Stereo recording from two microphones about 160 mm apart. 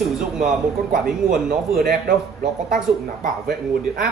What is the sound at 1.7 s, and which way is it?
Speech, 70° right (ahead or behind).